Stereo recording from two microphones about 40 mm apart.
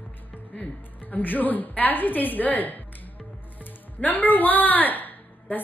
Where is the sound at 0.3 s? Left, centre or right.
Left.